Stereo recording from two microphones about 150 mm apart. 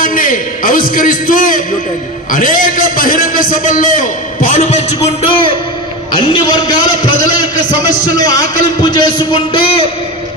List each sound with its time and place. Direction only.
0.0 s a man's voice: 65° left (ahead or behind)
5.2 s a man's voice: 35° left (ahead or behind)